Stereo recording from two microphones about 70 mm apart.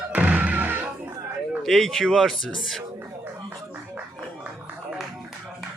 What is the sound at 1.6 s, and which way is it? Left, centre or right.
A man's voice, centre.